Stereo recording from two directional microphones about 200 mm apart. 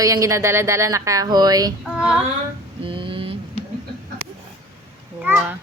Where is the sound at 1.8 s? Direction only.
5° right (ahead or behind).